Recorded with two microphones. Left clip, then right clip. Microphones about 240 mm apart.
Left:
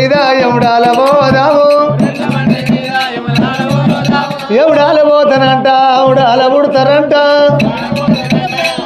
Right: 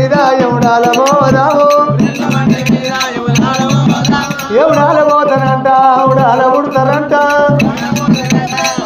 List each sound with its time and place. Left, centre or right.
0.0 s music: left
4.6 s music: left